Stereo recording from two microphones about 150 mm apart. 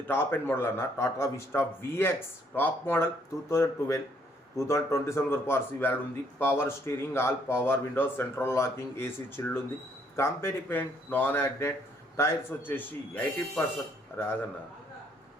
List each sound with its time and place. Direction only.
0.1 s a man's voice: 15° left (ahead or behind)